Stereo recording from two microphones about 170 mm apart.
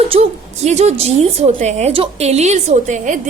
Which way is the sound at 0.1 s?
40° right (ahead or behind).